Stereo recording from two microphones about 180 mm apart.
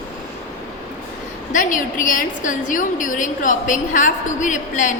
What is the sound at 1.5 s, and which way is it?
A woman's voice, 45° left (ahead or behind).